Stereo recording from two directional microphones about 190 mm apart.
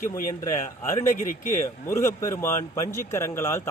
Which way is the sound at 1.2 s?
40° left (ahead or behind).